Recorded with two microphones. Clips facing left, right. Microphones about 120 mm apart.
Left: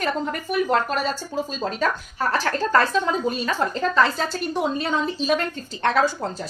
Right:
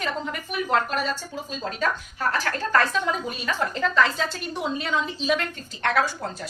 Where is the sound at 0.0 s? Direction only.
40° left (ahead or behind).